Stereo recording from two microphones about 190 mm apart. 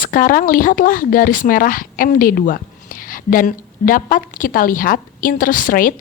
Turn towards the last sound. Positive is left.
turn(degrees=45)  # may be behind; listen again after turning